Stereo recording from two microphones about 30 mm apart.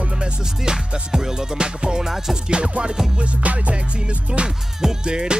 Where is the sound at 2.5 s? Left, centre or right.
Right.